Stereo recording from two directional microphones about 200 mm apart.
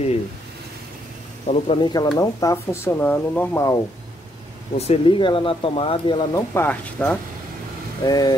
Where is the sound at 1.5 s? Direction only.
25° left (ahead or behind).